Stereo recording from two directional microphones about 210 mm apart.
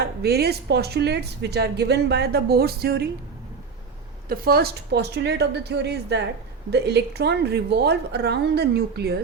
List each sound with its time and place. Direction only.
0.0 s a woman's voice: 50° right (ahead or behind)
4.3 s a woman's voice: 45° right (ahead or behind)